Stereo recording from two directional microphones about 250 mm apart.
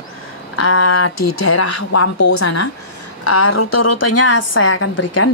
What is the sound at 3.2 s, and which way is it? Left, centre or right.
A woman's voice, left.